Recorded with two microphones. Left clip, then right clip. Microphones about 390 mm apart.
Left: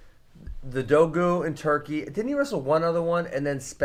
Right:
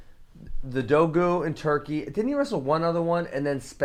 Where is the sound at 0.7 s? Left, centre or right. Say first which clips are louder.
Left 1 dB; right.